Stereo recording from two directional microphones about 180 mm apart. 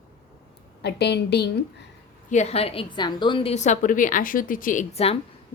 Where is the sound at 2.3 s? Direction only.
35° left (ahead or behind).